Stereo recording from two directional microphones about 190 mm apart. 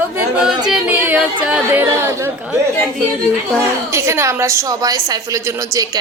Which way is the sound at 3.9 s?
15° right (ahead or behind).